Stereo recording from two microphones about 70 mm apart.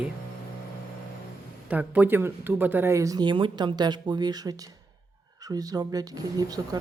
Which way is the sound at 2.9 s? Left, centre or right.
Right.